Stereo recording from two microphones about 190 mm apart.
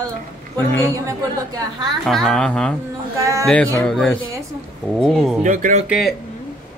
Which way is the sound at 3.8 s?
5° left (ahead or behind).